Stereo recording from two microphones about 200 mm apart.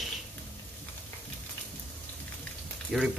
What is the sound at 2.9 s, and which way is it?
Speech, centre (ahead or behind).